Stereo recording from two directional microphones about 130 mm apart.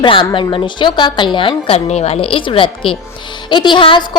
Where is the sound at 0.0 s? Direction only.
40° left (ahead or behind).